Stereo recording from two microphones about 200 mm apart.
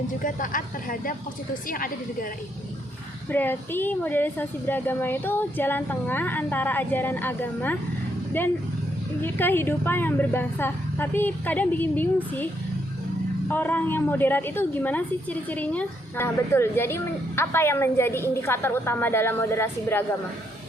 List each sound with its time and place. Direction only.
0.2 s speech: 40° left (ahead or behind)
3.2 s a woman's voice: 10° left (ahead or behind)
13.5 s a woman's voice: 10° left (ahead or behind)